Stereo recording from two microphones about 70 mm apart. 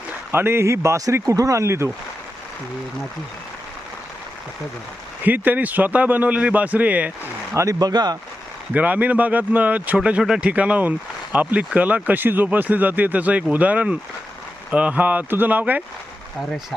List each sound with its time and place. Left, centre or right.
0.3 s speech: right
5.2 s speech: right
7.5 s speech: right
7.8 s speech: right
8.7 s speech: right